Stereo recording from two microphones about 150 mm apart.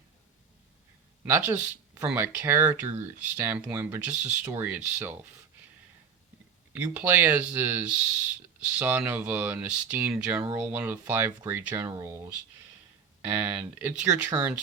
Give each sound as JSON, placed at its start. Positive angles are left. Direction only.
{"t": 1.2, "sound": "speech", "side_deg": -10}
{"t": 6.7, "sound": "speech", "side_deg": -10}
{"t": 13.4, "sound": "speech", "side_deg": -15}